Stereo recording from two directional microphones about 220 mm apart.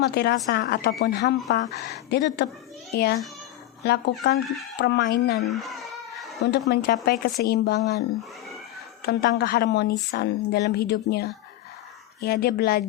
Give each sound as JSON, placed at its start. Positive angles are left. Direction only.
{"t": 0.0, "sound": "speech", "side_deg": 50}
{"t": 5.5, "sound": "a sound", "side_deg": 0}
{"t": 6.4, "sound": "speech", "side_deg": 50}
{"t": 9.0, "sound": "speech", "side_deg": 45}